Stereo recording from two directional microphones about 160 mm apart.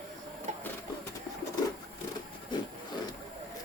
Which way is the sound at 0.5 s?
50° right (ahead or behind).